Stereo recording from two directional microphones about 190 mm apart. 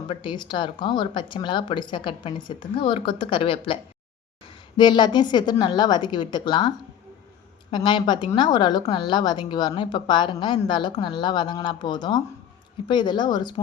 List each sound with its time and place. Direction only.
0.1 s a woman's voice: 25° left (ahead or behind)
4.8 s a woman's voice: 25° left (ahead or behind)